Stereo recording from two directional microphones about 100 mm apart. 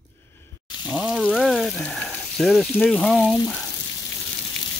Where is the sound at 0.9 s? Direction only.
5° right (ahead or behind).